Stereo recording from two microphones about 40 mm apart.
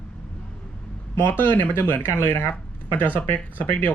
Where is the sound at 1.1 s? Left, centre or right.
Left.